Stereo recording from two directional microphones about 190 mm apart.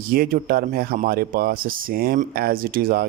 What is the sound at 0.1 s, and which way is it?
Speech, 50° right (ahead or behind).